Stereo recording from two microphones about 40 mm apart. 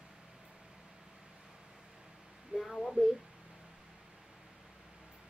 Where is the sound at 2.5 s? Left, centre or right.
Right.